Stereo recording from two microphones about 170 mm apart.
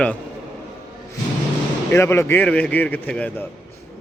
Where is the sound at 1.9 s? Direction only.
15° left (ahead or behind).